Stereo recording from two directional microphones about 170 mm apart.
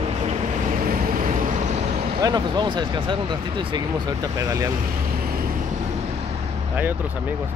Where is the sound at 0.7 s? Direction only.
55° right (ahead or behind).